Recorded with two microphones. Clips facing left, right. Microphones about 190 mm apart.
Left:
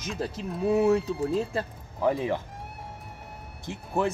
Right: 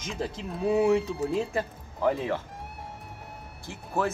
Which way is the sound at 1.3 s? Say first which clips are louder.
Right 1 dB; 15° right (ahead or behind).